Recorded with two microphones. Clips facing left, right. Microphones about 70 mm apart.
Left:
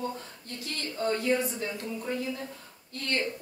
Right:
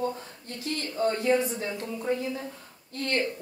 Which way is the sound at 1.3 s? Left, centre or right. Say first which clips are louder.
Right 4 dB; centre.